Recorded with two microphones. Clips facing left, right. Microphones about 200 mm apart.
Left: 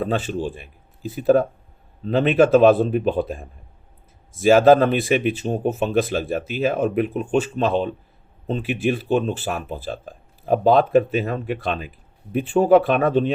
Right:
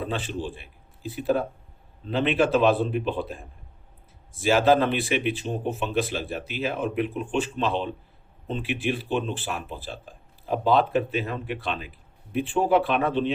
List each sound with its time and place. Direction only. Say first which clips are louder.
0.0 s speech: left 6 dB; 45° left (ahead or behind)